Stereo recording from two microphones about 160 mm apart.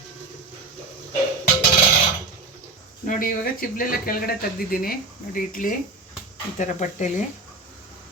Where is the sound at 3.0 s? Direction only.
60° left (ahead or behind).